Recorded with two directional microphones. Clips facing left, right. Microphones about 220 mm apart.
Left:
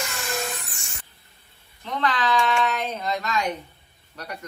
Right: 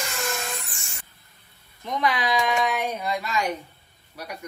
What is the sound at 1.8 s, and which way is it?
Speech, 10° right (ahead or behind).